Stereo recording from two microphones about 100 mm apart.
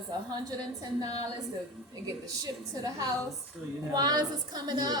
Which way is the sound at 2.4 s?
40° right (ahead or behind).